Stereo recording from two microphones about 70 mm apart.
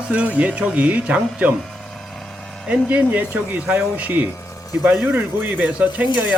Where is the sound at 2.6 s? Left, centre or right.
Centre.